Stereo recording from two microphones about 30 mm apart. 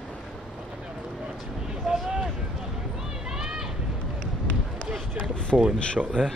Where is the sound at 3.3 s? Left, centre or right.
Centre.